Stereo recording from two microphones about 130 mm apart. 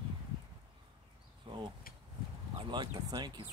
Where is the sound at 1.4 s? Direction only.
35° right (ahead or behind).